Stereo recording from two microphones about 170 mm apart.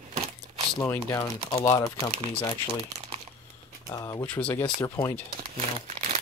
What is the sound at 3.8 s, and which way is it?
Speech, 20° left (ahead or behind).